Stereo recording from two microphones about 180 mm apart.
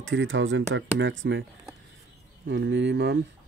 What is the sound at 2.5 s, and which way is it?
Speech, 90° right.